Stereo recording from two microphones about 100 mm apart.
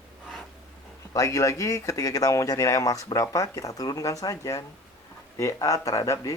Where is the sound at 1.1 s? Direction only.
35° left (ahead or behind).